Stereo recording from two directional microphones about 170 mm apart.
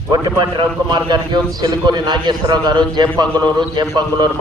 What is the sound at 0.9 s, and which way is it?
A man's voice, 25° right (ahead or behind).